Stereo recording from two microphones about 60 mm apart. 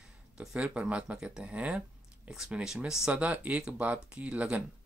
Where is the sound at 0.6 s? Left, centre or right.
Right.